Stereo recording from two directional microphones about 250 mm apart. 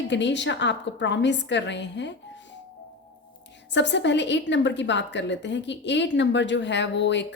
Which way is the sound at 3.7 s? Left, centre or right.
Left.